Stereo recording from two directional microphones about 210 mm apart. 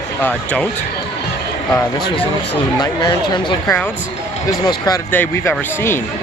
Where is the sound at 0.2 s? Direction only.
10° left (ahead or behind).